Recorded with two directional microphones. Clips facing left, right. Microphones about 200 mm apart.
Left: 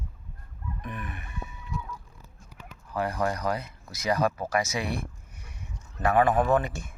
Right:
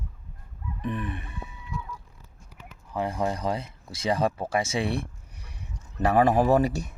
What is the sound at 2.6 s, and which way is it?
Speech, 25° right (ahead or behind).